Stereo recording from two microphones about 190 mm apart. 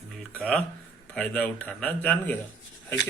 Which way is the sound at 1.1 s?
5° left (ahead or behind).